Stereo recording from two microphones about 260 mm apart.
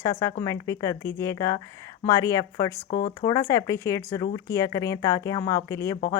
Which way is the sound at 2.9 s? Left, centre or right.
Left.